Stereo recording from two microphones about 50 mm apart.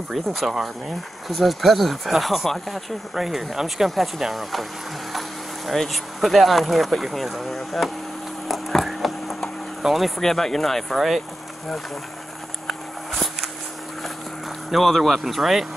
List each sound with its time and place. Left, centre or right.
0.1 s speech: centre
5.7 s speech: centre
8.5 s a sound: centre
9.8 s speech: centre
14.7 s speech: centre